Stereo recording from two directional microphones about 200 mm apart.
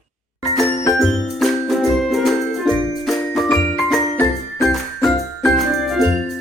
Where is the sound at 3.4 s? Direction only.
Centre (ahead or behind).